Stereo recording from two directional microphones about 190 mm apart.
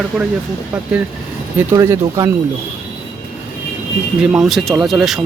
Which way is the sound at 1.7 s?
15° right (ahead or behind).